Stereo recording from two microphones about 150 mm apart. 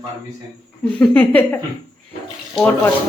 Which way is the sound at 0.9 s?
10° left (ahead or behind).